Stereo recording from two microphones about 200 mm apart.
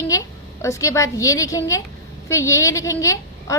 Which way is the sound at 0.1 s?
15° left (ahead or behind).